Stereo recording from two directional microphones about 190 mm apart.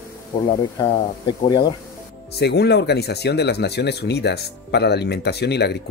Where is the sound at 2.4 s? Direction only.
60° left (ahead or behind).